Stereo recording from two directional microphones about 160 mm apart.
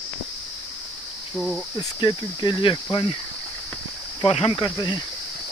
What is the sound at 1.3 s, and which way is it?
Cricket, centre (ahead or behind).